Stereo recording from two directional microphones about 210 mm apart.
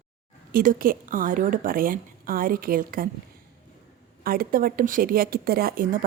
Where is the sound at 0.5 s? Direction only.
40° right (ahead or behind).